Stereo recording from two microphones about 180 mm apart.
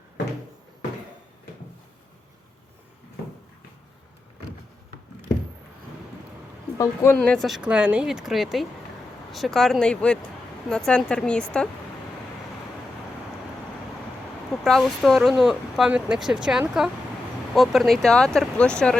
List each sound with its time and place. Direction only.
6.7 s speech: 15° left (ahead or behind)
7.2 s speech: centre (ahead or behind)
14.5 s speech: centre (ahead or behind)